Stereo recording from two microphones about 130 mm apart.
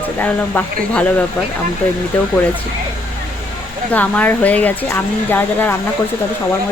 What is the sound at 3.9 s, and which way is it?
Speech, 10° left (ahead or behind).